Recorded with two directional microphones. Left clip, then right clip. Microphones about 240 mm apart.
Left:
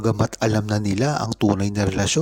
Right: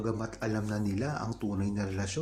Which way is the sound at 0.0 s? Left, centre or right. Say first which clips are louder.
Left 12 dB; left.